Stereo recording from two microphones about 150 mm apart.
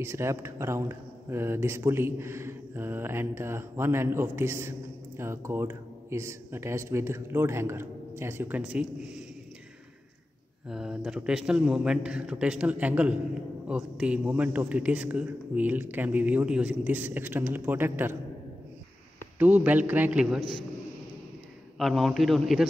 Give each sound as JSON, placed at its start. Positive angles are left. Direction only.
{"t": 0.0, "sound": "speech", "side_deg": -15}
{"t": 10.7, "sound": "a man's voice", "side_deg": -5}
{"t": 19.3, "sound": "speech", "side_deg": -10}
{"t": 21.7, "sound": "a man's voice", "side_deg": 0}